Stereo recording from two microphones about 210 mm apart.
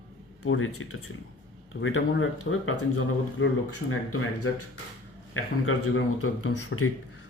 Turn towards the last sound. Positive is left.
turn(degrees=90)